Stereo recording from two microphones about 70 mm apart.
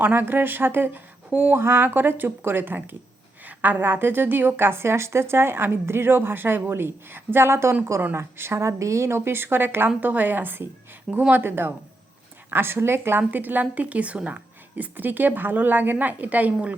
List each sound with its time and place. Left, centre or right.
0.0 s a woman's voice: right